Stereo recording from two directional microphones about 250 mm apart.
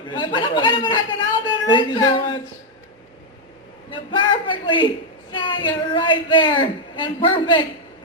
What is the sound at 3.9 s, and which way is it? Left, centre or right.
A man's voice, centre.